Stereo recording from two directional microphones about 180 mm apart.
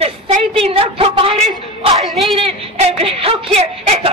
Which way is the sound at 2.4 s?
35° right (ahead or behind).